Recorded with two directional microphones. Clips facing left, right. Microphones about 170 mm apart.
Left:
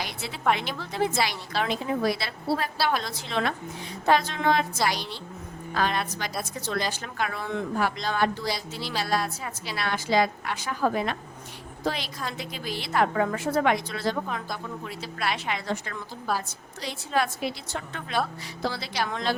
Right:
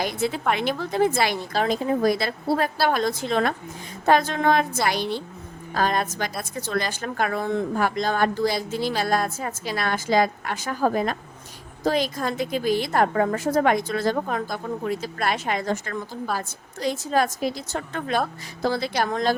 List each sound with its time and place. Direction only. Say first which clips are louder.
0.0 s speech: right 4 dB; 50° right (ahead or behind)
5.7 s speech: right 4 dB; 45° right (ahead or behind)